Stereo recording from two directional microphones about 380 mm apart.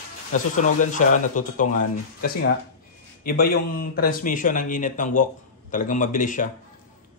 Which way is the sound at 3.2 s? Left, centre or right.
Left.